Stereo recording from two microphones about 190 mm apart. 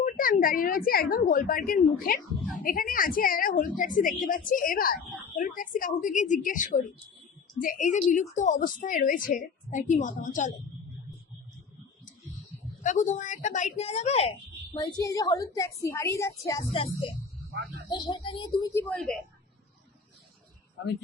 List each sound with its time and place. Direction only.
0.0 s a woman's voice: 45° left (ahead or behind)
12.8 s a woman's voice: 40° left (ahead or behind); by 19.2 s 5° left (ahead or behind)